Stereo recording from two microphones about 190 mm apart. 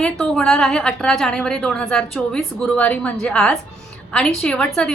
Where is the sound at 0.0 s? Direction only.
5° left (ahead or behind).